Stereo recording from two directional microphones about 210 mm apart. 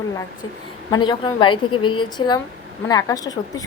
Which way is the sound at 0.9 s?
20° left (ahead or behind).